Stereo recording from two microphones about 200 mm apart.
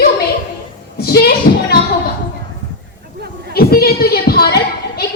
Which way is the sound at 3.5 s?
50° left (ahead or behind).